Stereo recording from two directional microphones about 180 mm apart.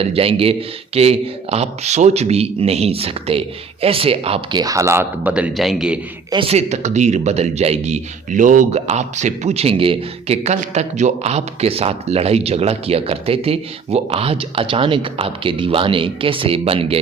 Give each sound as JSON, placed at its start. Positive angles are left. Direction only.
{"t": 0.0, "sound": "a man's voice", "side_deg": -30}
{"t": 6.3, "sound": "a man's voice", "side_deg": -30}